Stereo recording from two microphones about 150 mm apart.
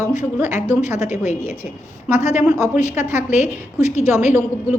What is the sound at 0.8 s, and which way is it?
A woman's voice, 50° left (ahead or behind).